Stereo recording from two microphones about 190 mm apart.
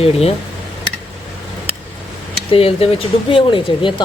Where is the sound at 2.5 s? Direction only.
30° left (ahead or behind).